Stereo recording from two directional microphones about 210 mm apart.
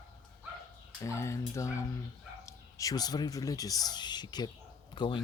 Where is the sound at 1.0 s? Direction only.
15° left (ahead or behind).